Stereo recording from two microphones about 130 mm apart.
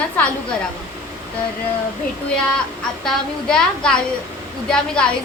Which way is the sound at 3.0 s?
5° left (ahead or behind).